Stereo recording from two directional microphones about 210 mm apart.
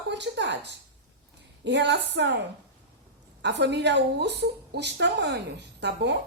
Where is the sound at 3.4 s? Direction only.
55° right (ahead or behind).